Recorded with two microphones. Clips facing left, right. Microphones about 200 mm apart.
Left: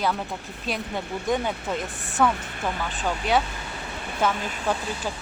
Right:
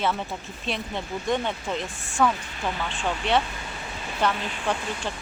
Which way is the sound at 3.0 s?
Centre (ahead or behind).